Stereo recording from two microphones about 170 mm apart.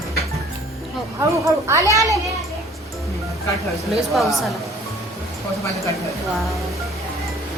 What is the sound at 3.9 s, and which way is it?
Speech, centre (ahead or behind).